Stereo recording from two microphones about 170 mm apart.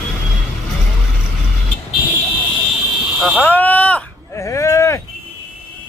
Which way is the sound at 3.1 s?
Centre (ahead or behind).